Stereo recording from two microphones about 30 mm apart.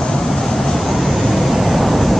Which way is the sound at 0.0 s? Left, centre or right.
Left.